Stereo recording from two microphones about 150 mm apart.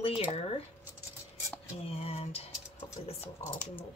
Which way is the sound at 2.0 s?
45° left (ahead or behind).